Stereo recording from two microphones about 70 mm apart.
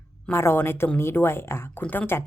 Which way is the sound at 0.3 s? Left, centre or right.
Left.